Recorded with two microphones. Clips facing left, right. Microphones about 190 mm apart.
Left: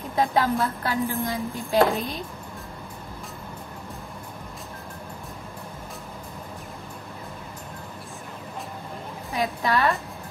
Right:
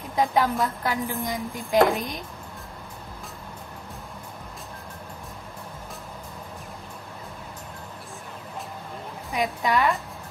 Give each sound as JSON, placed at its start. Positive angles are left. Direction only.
{"t": 0.1, "sound": "a woman's voice", "side_deg": -15}
{"t": 9.3, "sound": "a woman's voice", "side_deg": -15}